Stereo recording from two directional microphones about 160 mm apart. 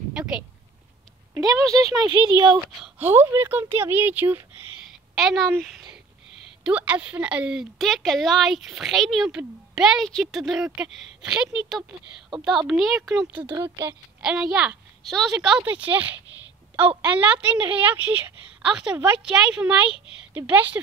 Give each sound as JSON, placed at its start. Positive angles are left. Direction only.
{"t": 0.1, "sound": "a sound", "side_deg": -5}
{"t": 1.3, "sound": "speech", "side_deg": -25}
{"t": 2.8, "sound": "a woman's voice", "side_deg": -15}
{"t": 5.1, "sound": "a woman's voice", "side_deg": 0}
{"t": 13.5, "sound": "a woman's voice", "side_deg": -15}
{"t": 14.2, "sound": "a woman's voice", "side_deg": -5}